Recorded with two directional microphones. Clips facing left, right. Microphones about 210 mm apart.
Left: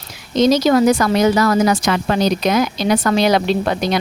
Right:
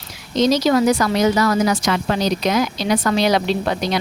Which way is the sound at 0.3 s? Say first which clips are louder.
Left 3 dB; 50° left (ahead or behind).